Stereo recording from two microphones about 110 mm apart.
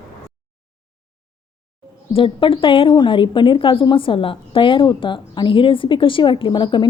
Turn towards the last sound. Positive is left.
turn(degrees=45)  # may be behind; listen again after turning